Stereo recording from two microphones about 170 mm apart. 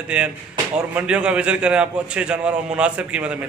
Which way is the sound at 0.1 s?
5° right (ahead or behind).